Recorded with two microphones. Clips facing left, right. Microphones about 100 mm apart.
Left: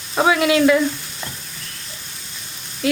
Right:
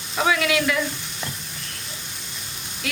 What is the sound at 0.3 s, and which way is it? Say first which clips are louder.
Frying: left 5 dB; 25° left (ahead or behind).